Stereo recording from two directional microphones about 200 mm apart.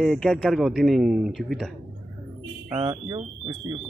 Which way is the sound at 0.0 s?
Centre (ahead or behind).